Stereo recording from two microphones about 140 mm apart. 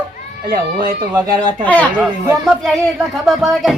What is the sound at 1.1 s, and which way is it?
Speech, 30° right (ahead or behind).